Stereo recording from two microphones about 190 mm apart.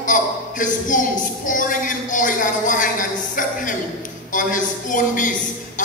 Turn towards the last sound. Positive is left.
turn(degrees=45)  # may be behind; listen again after turning